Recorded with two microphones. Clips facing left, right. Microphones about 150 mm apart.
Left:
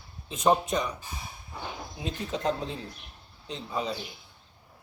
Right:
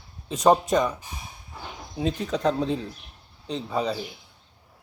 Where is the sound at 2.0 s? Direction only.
35° right (ahead or behind).